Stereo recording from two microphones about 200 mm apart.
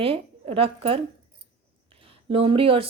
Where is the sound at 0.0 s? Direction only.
30° right (ahead or behind).